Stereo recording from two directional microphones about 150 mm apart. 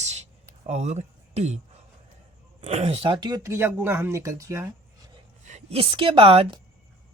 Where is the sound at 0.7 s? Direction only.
50° right (ahead or behind).